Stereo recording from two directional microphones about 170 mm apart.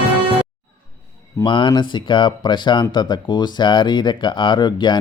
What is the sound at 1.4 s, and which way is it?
Speech, 30° left (ahead or behind).